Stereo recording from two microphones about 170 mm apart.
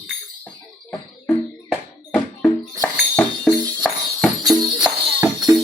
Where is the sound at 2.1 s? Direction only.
5° left (ahead or behind).